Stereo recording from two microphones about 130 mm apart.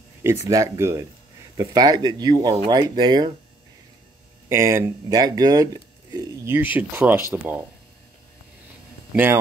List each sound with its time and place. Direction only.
0.2 s speech: 20° right (ahead or behind)
4.5 s speech: 20° right (ahead or behind)
9.1 s speech: 15° right (ahead or behind)